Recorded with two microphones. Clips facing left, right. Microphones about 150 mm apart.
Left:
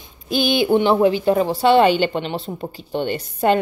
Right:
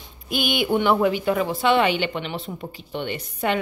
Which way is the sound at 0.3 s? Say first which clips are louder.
Left 5 dB; 30° left (ahead or behind).